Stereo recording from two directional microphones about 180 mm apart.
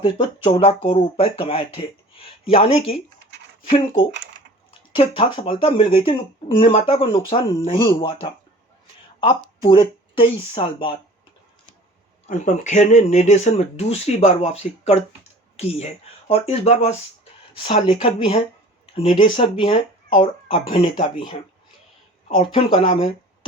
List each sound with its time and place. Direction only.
0.0 s speech: 30° left (ahead or behind)
3.2 s a sound: 75° right (ahead or behind)
3.7 s speech: 30° left (ahead or behind)
9.6 s speech: 30° left (ahead or behind)
12.2 s speech: 40° left (ahead or behind)
22.4 s speech: 30° left (ahead or behind)